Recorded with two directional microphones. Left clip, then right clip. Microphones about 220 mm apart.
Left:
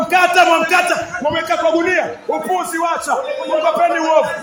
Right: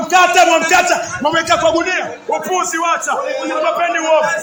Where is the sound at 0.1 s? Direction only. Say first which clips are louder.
Right 2 dB; 5° left (ahead or behind).